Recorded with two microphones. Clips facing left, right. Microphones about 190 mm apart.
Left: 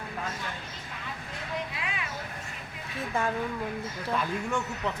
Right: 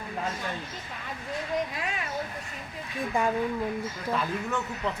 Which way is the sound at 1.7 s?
45° right (ahead or behind).